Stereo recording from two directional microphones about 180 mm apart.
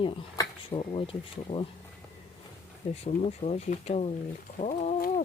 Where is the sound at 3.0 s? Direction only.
35° left (ahead or behind).